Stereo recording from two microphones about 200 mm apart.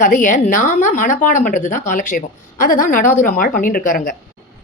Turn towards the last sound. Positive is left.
turn(degrees=45)  # may be behind; listen again after turning